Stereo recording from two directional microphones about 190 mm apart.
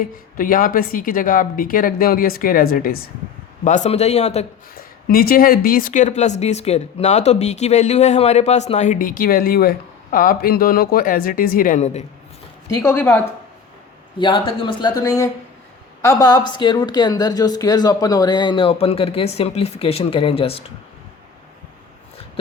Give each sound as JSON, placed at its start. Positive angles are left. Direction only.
{"t": 0.0, "sound": "speech", "side_deg": 50}
{"t": 3.6, "sound": "speech", "side_deg": 40}
{"t": 4.7, "sound": "speech", "side_deg": 50}
{"t": 12.7, "sound": "a woman's voice", "side_deg": 10}
{"t": 14.2, "sound": "a woman's voice", "side_deg": 25}